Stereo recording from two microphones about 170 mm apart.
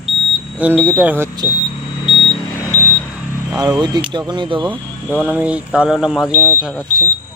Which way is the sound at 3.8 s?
25° right (ahead or behind).